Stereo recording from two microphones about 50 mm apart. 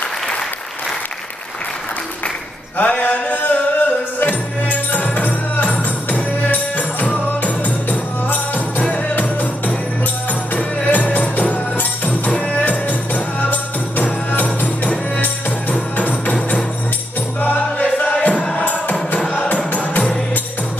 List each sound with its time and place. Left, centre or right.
2.8 s music: left
10.5 s music: left
12.3 s music: left
17.4 s music: left